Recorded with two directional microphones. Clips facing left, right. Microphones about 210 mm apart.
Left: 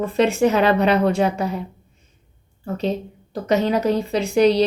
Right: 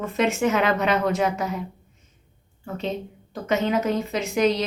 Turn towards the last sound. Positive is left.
turn(degrees=35)  # may be behind; listen again after turning